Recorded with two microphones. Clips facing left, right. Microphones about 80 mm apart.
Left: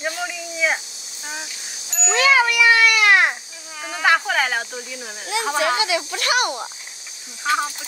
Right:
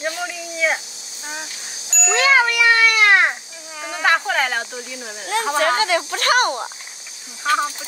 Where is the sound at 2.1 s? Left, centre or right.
Right.